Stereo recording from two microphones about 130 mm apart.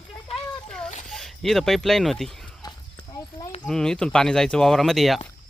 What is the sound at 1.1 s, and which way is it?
Speech, 5° left (ahead or behind).